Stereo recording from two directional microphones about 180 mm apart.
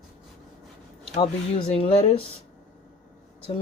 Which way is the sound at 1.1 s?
30° left (ahead or behind).